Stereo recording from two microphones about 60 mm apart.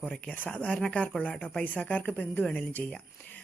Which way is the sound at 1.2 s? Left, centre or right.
Left.